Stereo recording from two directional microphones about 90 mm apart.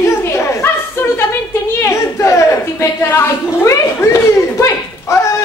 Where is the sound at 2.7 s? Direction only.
25° left (ahead or behind).